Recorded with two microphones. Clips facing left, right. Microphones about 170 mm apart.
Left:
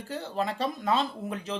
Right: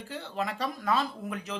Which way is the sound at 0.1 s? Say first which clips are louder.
Left 3 dB; 35° left (ahead or behind).